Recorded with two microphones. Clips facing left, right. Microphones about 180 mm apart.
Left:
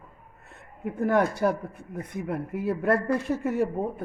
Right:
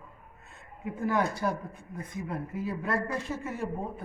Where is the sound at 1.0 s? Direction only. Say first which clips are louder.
Left 6 dB; 60° left (ahead or behind).